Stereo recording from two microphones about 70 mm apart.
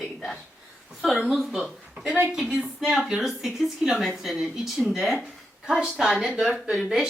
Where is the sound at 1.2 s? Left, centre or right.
Centre.